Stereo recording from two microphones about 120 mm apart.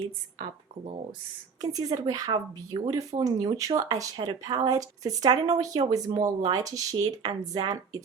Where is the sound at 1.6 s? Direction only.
30° right (ahead or behind).